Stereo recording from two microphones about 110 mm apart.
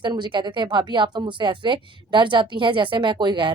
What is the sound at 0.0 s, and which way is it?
Speech, 45° right (ahead or behind).